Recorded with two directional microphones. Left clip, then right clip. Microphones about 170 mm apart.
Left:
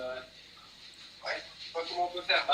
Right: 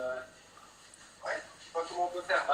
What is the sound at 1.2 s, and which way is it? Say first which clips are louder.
Speech: even; 15° left (ahead or behind).